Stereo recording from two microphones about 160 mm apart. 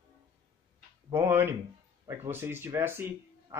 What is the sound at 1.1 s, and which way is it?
Speech, 15° right (ahead or behind).